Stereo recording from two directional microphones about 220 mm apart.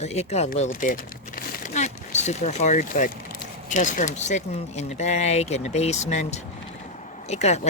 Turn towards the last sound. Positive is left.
turn(degrees=30)  # may be behind; listen again after turning